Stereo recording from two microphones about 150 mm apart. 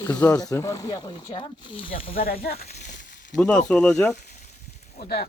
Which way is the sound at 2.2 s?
80° left.